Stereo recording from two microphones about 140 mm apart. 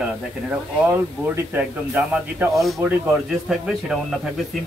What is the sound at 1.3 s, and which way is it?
Speech, 15° right (ahead or behind).